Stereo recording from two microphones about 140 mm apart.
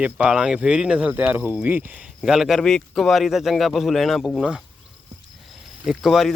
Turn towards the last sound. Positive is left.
turn(degrees=0)  # may be behind; listen again after turning